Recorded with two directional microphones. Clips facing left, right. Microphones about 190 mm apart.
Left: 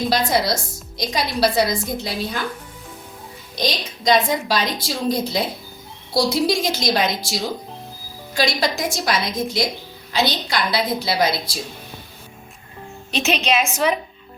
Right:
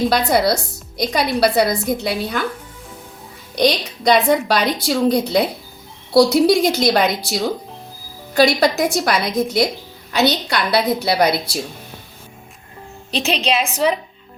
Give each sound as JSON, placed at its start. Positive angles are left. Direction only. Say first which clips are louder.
{"t": 0.1, "sound": "speech", "louder": "right 3 dB", "side_deg": -60}
{"t": 3.5, "sound": "speech", "louder": "right 7 dB", "side_deg": -65}
{"t": 13.1, "sound": "a woman's voice", "louder": "right 1 dB", "side_deg": -30}